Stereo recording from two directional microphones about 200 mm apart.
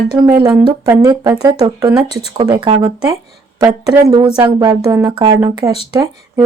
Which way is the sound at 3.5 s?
15° right (ahead or behind).